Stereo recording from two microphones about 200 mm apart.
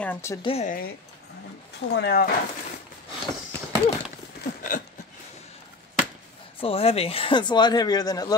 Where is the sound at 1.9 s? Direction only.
50° left (ahead or behind).